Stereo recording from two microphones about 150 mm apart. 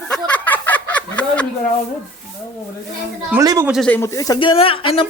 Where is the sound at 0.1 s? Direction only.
5° left (ahead or behind).